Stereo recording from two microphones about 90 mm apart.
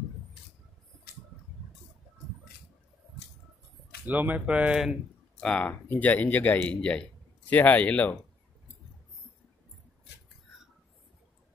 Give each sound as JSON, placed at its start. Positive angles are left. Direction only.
{"t": 4.0, "sound": "speech", "side_deg": -20}
{"t": 5.4, "sound": "speech", "side_deg": 10}